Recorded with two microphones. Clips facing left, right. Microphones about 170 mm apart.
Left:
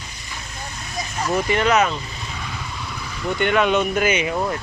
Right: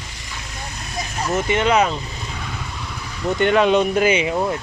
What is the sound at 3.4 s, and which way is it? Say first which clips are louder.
Speech: right 3 dB; 30° right (ahead or behind).